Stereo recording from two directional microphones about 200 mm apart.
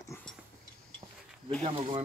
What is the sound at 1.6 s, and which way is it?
Speech, 25° right (ahead or behind).